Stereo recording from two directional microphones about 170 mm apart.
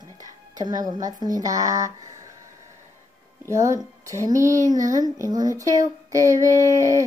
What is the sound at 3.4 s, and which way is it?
Speech, 20° right (ahead or behind).